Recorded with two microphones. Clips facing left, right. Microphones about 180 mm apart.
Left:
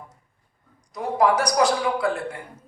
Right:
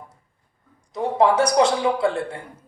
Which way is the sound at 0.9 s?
25° right (ahead or behind).